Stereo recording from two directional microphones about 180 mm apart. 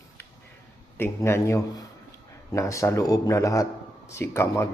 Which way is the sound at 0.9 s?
15° left (ahead or behind).